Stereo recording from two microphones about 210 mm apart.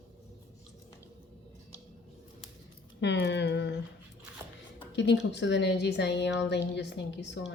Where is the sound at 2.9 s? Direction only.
55° left (ahead or behind).